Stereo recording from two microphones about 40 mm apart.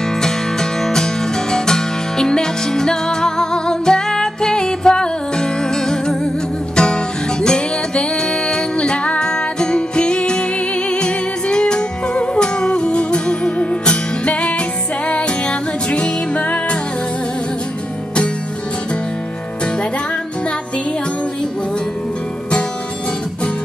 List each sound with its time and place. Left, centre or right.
0.0 s music: centre; by 16.7 s left